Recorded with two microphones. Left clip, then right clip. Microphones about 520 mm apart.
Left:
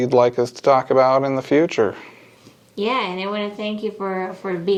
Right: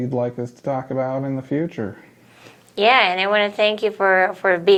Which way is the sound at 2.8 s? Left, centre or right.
Right.